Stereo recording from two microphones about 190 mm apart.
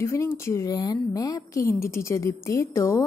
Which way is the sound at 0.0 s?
15° left (ahead or behind).